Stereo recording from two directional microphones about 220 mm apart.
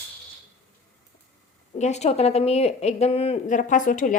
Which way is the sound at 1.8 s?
30° left (ahead or behind).